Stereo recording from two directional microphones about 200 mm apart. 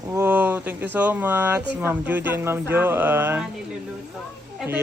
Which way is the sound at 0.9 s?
10° right (ahead or behind).